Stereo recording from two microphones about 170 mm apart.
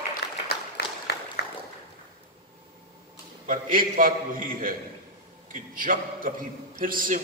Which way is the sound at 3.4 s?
55° right (ahead or behind).